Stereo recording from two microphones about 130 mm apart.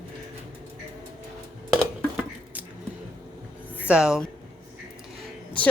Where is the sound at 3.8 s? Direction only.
10° right (ahead or behind).